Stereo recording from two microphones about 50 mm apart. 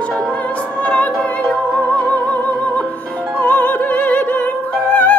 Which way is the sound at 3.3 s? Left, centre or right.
Left.